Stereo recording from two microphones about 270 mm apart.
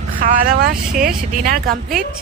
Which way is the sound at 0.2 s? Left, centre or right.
Right.